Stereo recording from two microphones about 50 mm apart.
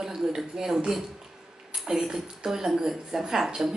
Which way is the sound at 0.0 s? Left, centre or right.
Centre.